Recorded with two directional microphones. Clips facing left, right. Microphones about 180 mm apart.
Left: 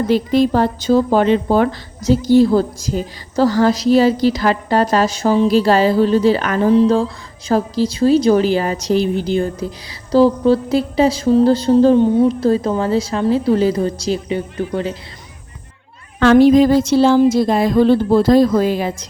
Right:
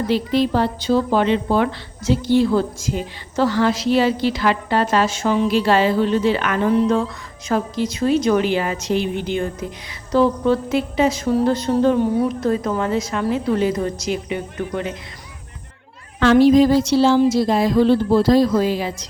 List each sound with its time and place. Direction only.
0.1 s a woman's voice: 45° left (ahead or behind)
16.2 s speech: 50° left (ahead or behind)